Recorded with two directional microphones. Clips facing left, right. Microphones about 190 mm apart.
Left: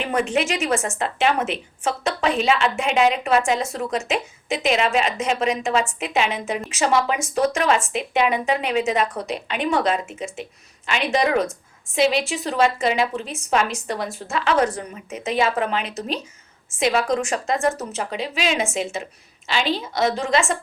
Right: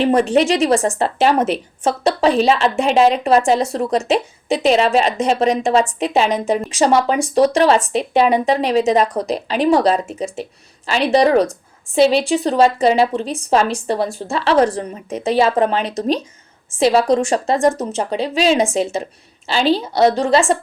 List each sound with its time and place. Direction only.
0.0 s a woman's voice: 35° right (ahead or behind)